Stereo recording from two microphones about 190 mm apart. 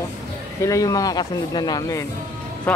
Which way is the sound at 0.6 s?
15° left (ahead or behind).